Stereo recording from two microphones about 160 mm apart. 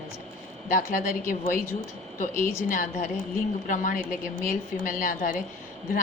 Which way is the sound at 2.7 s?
55° left (ahead or behind).